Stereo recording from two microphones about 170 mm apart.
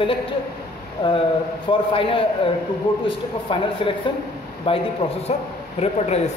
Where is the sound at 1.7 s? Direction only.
30° left (ahead or behind).